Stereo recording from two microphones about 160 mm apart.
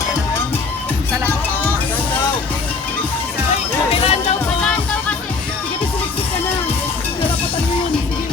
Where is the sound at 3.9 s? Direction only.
40° left (ahead or behind).